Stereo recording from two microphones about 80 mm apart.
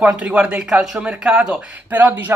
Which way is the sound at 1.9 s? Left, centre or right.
Right.